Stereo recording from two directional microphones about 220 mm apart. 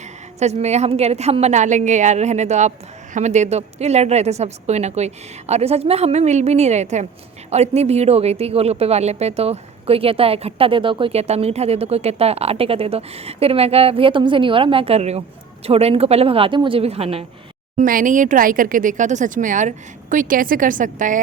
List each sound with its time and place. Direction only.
0.3 s a woman's voice: 30° right (ahead or behind)
17.7 s a woman's voice: 40° right (ahead or behind)